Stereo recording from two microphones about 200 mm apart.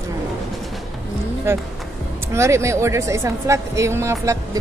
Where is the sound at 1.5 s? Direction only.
15° right (ahead or behind).